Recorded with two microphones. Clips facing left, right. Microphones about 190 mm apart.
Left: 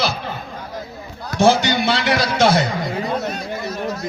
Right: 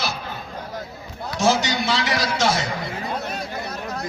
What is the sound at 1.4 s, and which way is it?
A man's voice, 60° left (ahead or behind).